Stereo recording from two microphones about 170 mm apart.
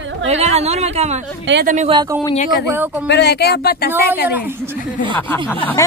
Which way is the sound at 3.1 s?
80° left.